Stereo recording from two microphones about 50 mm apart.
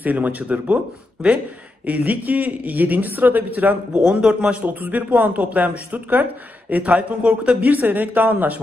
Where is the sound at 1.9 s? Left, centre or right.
Right.